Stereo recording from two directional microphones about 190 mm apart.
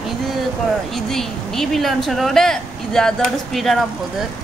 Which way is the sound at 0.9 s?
Centre (ahead or behind).